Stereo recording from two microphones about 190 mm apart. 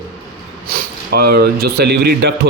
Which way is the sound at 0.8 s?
55° right (ahead or behind).